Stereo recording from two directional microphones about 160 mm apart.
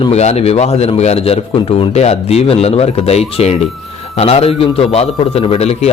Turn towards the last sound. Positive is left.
turn(degrees=40)  # may be behind; listen again after turning